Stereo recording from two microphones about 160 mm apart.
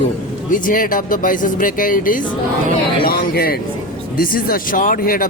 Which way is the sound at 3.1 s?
70° left (ahead or behind).